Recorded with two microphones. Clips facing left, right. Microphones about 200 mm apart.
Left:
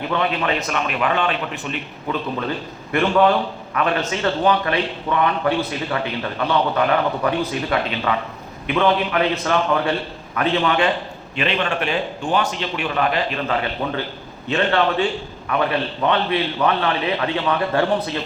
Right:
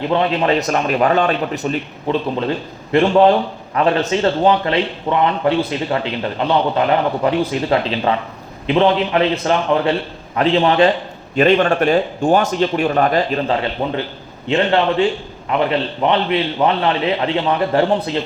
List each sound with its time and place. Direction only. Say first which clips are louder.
0.1 s a man's voice: right 5 dB; 30° right (ahead or behind)
2.9 s a man's voice: right 5 dB; 30° right (ahead or behind)
13.5 s a man's voice: right 4 dB; 25° right (ahead or behind)